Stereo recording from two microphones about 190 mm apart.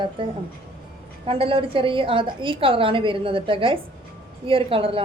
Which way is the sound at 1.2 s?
30° right (ahead or behind).